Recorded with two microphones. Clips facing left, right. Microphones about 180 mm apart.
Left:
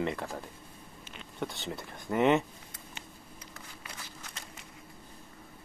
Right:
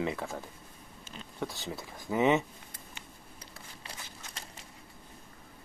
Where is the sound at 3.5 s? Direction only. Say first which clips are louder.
Even; 30° right (ahead or behind).